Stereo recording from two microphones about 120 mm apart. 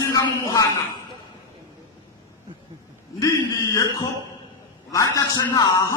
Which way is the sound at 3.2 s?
25° left (ahead or behind).